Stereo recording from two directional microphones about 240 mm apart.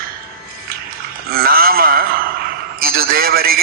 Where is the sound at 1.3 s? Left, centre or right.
Right.